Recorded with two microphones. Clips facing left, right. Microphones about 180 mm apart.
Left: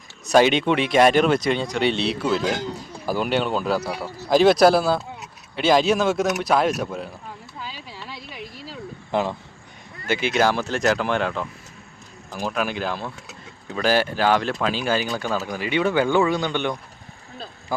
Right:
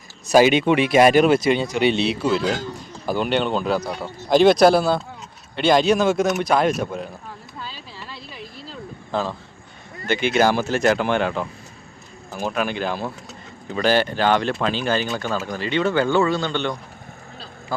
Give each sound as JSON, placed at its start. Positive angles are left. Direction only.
{"t": 0.3, "sound": "speech", "side_deg": -5}
{"t": 2.4, "sound": "speech", "side_deg": 15}
{"t": 3.1, "sound": "speech", "side_deg": 5}
{"t": 7.6, "sound": "a sound", "side_deg": 15}
{"t": 10.1, "sound": "speech", "side_deg": 0}
{"t": 17.7, "sound": "a sound", "side_deg": 15}